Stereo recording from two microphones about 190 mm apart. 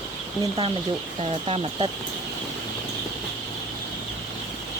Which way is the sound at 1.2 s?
30° right (ahead or behind).